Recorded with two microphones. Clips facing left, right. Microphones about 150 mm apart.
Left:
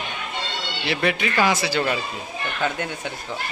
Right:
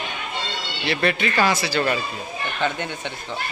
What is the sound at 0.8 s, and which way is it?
Speech, 10° left (ahead or behind).